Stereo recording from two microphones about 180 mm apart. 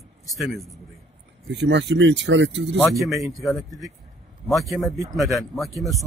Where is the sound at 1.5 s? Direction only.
80° right.